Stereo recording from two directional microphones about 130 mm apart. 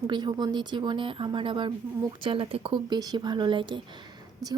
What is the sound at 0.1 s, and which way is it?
A woman's voice, 35° right (ahead or behind).